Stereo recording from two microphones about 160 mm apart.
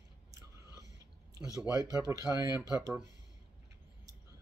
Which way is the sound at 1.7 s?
20° right (ahead or behind).